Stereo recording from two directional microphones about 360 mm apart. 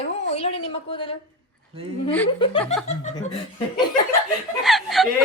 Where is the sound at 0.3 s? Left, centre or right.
Centre.